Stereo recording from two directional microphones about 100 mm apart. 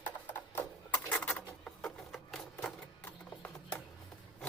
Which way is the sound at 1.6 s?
5° left (ahead or behind).